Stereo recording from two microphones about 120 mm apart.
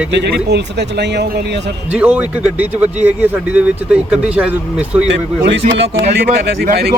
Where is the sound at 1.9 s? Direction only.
10° right (ahead or behind).